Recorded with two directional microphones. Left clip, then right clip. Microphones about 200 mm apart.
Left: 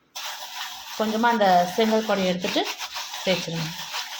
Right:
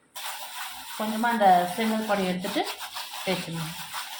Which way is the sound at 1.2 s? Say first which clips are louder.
Even; 35° left (ahead or behind).